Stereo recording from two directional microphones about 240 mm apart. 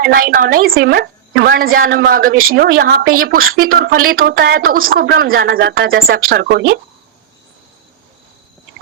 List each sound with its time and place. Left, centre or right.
0.0 s a woman's voice: right